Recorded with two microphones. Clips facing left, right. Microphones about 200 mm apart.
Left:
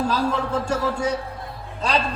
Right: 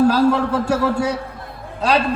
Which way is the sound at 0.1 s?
65° right (ahead or behind).